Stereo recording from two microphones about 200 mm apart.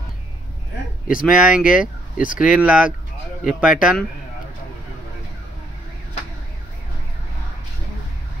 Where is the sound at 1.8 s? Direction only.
40° left (ahead or behind).